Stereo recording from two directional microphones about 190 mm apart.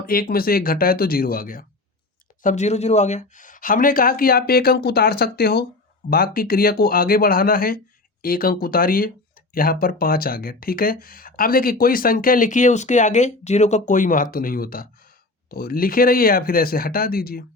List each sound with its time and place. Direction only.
0.0 s speech: 50° left (ahead or behind)